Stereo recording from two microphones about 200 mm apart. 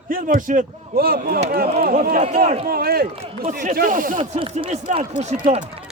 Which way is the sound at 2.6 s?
50° right (ahead or behind).